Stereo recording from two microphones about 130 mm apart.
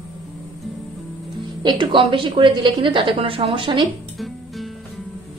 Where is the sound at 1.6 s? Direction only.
40° right (ahead or behind).